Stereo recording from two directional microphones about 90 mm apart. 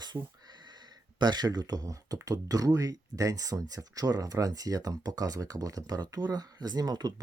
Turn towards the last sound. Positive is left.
turn(degrees=-50)  # may be behind; listen again after turning